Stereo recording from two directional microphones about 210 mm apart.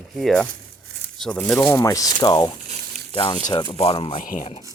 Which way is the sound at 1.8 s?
15° left (ahead or behind).